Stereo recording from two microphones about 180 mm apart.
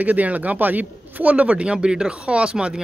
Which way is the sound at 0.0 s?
10° right (ahead or behind).